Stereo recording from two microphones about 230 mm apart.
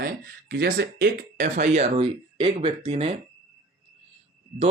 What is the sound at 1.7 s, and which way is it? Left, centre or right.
Speech, right.